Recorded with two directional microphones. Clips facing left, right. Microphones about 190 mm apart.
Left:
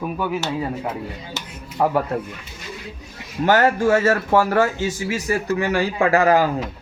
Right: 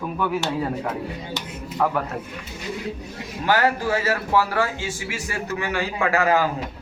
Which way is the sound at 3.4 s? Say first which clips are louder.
Left 5 dB; 45° left (ahead or behind).